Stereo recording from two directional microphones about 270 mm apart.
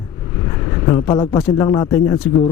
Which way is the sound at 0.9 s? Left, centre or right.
Centre.